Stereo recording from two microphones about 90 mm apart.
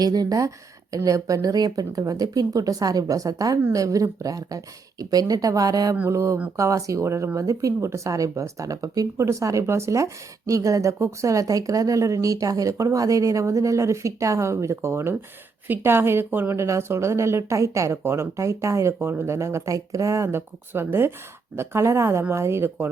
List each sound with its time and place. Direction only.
0.0 s speech: 45° right (ahead or behind)
6.1 s speech: 35° right (ahead or behind)